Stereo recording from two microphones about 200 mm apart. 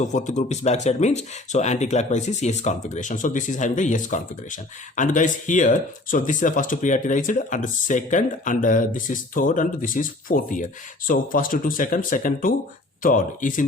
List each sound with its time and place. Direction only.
0.0 s speech: 35° left (ahead or behind)